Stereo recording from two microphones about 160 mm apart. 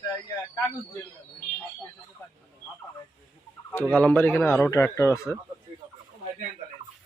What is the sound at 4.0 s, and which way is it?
A man's voice, 10° left (ahead or behind).